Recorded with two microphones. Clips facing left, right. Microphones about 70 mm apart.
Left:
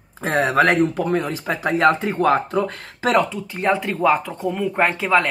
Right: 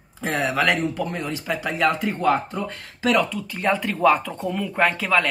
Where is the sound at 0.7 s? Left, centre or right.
Left.